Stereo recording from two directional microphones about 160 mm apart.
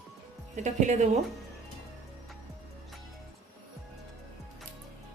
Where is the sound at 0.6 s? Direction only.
45° right (ahead or behind).